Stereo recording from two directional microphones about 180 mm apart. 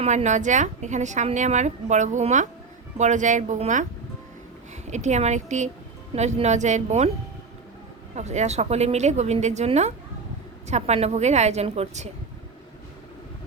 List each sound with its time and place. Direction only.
0.0 s a woman's voice: 40° right (ahead or behind)
4.9 s a woman's voice: 40° right (ahead or behind)
8.1 s a woman's voice: 40° right (ahead or behind)